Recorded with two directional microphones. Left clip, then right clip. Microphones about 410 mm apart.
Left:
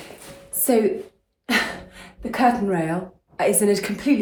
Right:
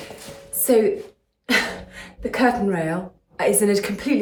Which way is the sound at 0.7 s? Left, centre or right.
Centre.